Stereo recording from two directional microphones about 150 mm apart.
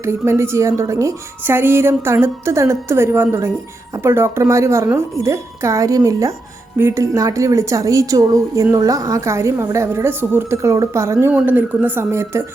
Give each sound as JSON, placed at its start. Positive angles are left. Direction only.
{"t": 0.0, "sound": "a woman's voice", "side_deg": -15}